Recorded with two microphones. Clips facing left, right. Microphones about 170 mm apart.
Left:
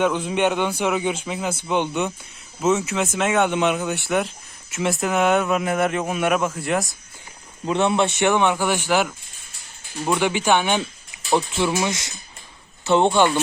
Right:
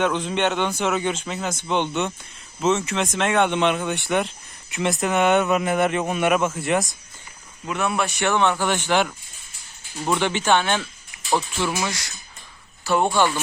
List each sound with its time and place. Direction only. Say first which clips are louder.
0.0 s a man's voice: left 2 dB; 10° left (ahead or behind)
7.6 s a man's voice: left 5 dB; 25° left (ahead or behind); by 9.1 s 5° left (ahead or behind)
10.2 s a man's voice: left 1 dB; 10° left (ahead or behind)